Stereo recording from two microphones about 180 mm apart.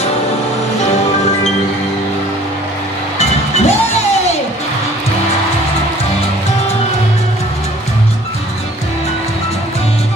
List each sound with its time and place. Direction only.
3.2 s music: 35° left (ahead or behind)